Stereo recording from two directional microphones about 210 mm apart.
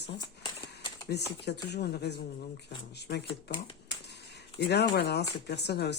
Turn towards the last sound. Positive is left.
turn(degrees=50)  # may be behind; listen again after turning